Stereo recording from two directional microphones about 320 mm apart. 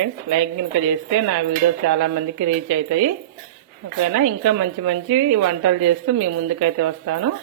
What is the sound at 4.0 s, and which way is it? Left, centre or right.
A woman's voice, right.